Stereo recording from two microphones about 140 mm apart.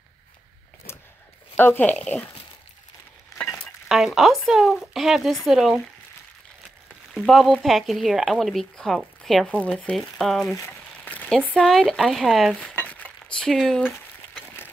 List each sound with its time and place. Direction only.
1.6 s speech: 15° left (ahead or behind)
3.9 s speech: 5° right (ahead or behind)
7.2 s speech: centre (ahead or behind)
11.1 s dishes: 10° left (ahead or behind)
13.9 s a sound: 15° left (ahead or behind)